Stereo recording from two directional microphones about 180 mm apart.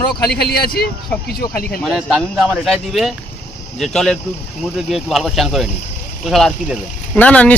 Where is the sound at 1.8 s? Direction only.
Centre (ahead or behind).